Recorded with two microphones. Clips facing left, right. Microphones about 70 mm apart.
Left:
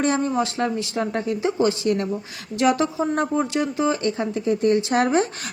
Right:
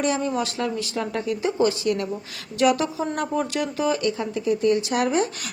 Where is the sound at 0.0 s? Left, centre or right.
Left.